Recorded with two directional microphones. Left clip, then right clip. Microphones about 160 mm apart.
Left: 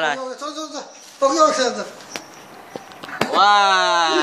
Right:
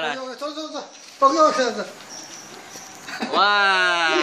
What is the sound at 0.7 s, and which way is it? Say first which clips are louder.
Speech: even; 20° right (ahead or behind).